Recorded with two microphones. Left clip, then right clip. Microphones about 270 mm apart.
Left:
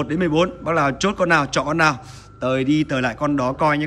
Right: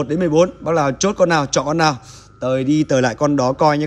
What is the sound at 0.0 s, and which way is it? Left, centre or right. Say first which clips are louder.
A man's voice: right 4 dB; centre.